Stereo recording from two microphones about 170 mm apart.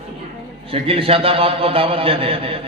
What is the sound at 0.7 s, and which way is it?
A man's voice, 35° right (ahead or behind).